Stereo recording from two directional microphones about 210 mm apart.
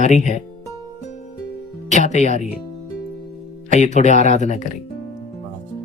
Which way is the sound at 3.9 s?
35° left (ahead or behind).